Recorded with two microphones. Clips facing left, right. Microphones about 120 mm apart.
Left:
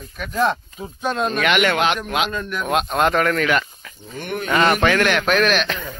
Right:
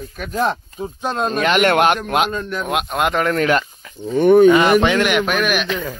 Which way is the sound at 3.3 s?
35° right (ahead or behind).